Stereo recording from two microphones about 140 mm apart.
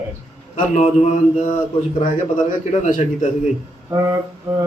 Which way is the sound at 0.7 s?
55° left (ahead or behind).